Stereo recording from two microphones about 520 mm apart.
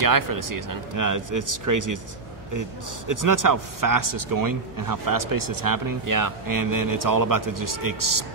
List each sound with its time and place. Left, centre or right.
0.0 s a man's voice: right
3.1 s a man's voice: right